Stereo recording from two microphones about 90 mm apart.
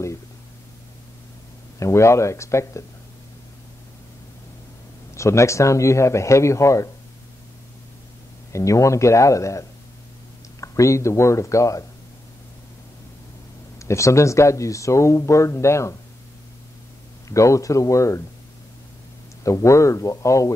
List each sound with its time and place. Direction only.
1.8 s speech: 30° left (ahead or behind)
5.1 s speech: 35° left (ahead or behind)
8.5 s speech: 35° left (ahead or behind)
13.7 s speech: 35° left (ahead or behind)
17.3 s speech: 35° left (ahead or behind)
19.4 s speech: 35° left (ahead or behind)